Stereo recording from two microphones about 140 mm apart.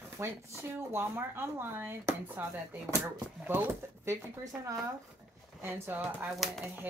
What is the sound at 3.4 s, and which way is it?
Speech, 15° right (ahead or behind).